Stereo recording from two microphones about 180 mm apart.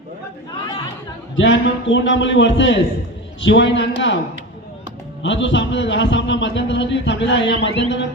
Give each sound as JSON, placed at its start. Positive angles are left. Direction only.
{"t": 1.4, "sound": "a man's voice", "side_deg": 90}
{"t": 5.2, "sound": "a man's voice", "side_deg": 90}
{"t": 7.8, "sound": "speech", "side_deg": 80}